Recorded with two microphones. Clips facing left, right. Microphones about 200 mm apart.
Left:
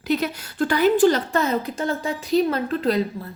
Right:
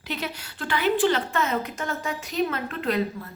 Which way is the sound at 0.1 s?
45° left (ahead or behind).